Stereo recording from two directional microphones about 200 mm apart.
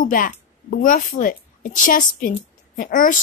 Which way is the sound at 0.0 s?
45° left (ahead or behind).